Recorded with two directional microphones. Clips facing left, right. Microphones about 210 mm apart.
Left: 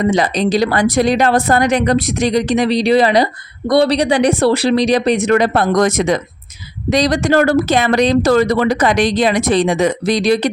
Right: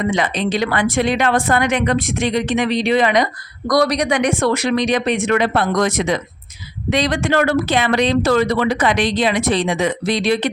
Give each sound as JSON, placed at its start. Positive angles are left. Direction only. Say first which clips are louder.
{"t": 0.0, "sound": "speech", "louder": "left 4 dB", "side_deg": 40}